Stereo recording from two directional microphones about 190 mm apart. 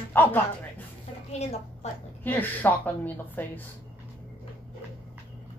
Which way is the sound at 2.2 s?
10° left (ahead or behind).